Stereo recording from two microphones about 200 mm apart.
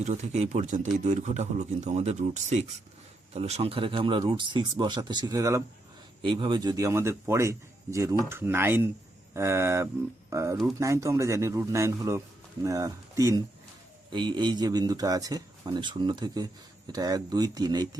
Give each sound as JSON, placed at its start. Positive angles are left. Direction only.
{"t": 0.0, "sound": "a man's voice", "side_deg": -35}